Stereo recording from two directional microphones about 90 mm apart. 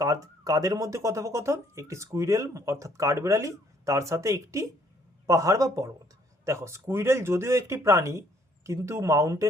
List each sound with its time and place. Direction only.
0.0 s speech: 40° right (ahead or behind)